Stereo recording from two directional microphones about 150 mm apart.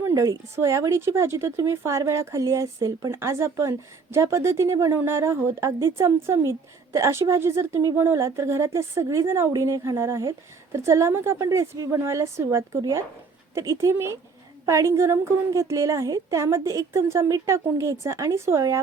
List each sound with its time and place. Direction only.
0.0 s speech: 20° right (ahead or behind)